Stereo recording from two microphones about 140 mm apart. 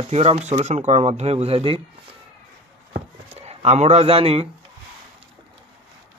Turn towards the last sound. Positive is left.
turn(degrees=-45)  # may be behind; listen again after turning